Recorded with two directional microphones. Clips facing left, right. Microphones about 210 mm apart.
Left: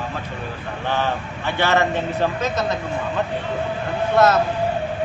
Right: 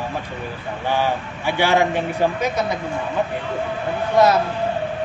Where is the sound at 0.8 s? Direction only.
10° right (ahead or behind).